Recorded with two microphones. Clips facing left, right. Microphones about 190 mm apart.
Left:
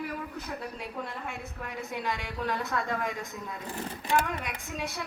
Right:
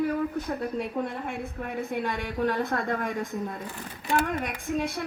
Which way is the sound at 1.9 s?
50° right (ahead or behind).